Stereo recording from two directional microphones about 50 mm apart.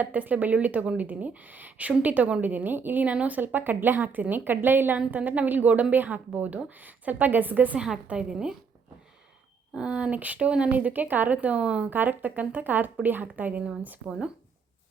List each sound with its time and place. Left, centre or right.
0.0 s a woman's voice: right
3.4 s a woman's voice: right
5.1 s a woman's voice: right
8.0 s a woman's voice: centre
9.7 s a woman's voice: centre
11.9 s a woman's voice: right